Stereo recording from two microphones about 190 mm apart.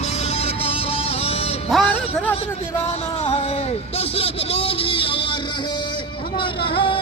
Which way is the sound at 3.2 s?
35° left (ahead or behind).